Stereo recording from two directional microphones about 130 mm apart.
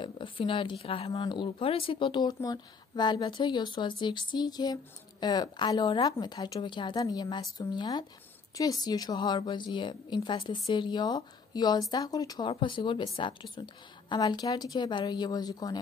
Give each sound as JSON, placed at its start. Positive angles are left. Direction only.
{"t": 0.0, "sound": "speech", "side_deg": 40}
{"t": 12.4, "sound": "speech", "side_deg": 40}